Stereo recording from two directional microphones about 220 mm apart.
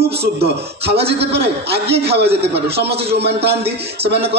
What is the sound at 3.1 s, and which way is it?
Speech, 50° right (ahead or behind).